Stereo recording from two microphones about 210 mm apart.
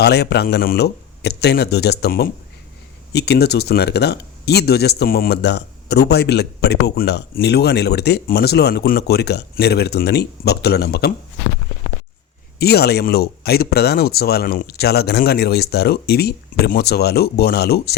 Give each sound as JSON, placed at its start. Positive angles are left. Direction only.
{"t": 0.0, "sound": "speech", "side_deg": 50}
{"t": 12.5, "sound": "speech", "side_deg": 50}